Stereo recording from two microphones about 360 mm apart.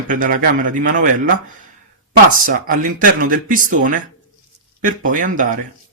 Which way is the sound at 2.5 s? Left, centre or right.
Right.